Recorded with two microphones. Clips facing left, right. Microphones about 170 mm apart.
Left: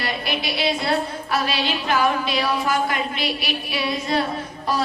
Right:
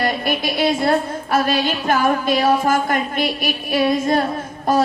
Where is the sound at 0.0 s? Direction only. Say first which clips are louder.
Right 6 dB; 50° right (ahead or behind).